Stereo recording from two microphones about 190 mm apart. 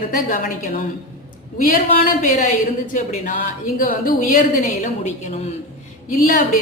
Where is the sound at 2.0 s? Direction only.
45° left (ahead or behind).